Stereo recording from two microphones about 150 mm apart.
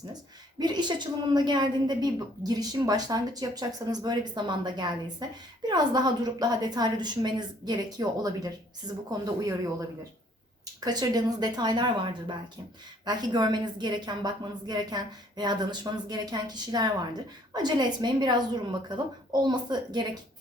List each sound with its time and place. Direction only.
0.6 s a woman's voice: 30° right (ahead or behind)
10.8 s a woman's voice: 25° right (ahead or behind)